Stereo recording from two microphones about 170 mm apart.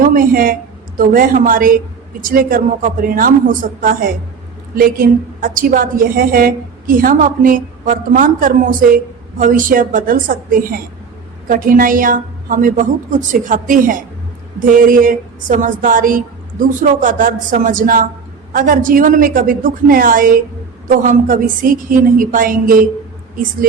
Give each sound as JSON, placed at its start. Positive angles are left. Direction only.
{"t": 0.0, "sound": "a woman's voice", "side_deg": -55}